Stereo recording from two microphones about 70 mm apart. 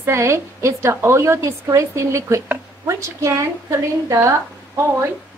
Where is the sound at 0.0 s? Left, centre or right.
Right.